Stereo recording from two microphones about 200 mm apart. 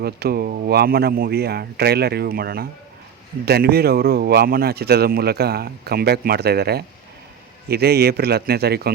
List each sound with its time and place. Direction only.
0.0 s speech: 50° right (ahead or behind)